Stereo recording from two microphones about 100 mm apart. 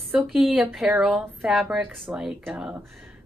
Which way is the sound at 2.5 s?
10° right (ahead or behind).